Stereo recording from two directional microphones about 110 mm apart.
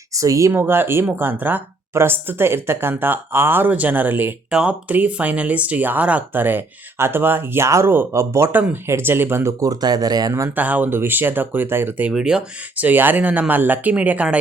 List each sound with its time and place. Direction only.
0.1 s speech: 30° right (ahead or behind)
10.5 s speech: 15° right (ahead or behind)